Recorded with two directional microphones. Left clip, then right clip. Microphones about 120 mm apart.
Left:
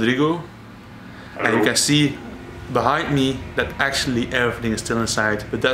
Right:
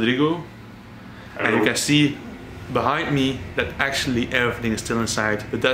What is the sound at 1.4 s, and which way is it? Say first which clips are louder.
A man's voice: left 2 dB; 20° left (ahead or behind).